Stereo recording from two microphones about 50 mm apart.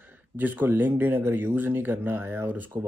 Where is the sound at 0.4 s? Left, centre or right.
Right.